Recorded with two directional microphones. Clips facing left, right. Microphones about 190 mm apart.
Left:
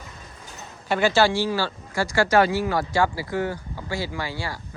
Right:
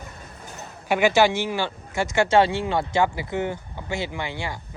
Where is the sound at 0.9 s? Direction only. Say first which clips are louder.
Right 1 dB; 15° right (ahead or behind).